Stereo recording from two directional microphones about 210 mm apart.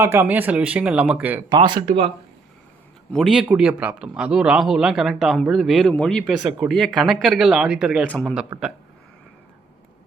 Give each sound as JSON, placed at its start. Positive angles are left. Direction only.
{"t": 0.0, "sound": "speech", "side_deg": -10}
{"t": 3.1, "sound": "a man's voice", "side_deg": 0}